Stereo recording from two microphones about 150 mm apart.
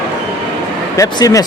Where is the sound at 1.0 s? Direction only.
20° left (ahead or behind).